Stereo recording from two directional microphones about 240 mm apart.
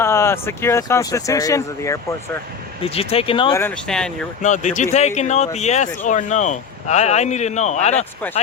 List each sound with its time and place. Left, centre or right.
0.0 s speech: centre
2.8 s speech: left
3.6 s speech: centre
4.4 s speech: left